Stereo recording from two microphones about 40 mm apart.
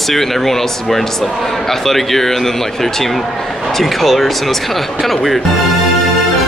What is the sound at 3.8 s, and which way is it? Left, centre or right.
Speech, centre.